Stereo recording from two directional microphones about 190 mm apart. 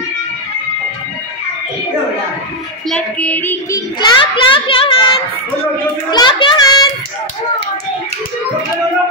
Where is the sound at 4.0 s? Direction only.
25° left (ahead or behind).